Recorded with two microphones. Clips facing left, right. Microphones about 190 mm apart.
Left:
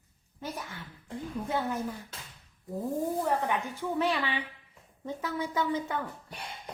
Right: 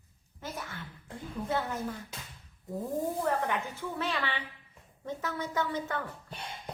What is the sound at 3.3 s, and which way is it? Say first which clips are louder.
A woman's voice: left 1 dB; 15° left (ahead or behind).